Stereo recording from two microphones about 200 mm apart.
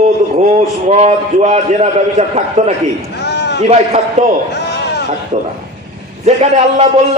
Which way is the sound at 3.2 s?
55° left (ahead or behind).